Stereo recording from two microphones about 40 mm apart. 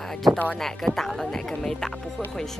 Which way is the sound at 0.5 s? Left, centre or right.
Centre.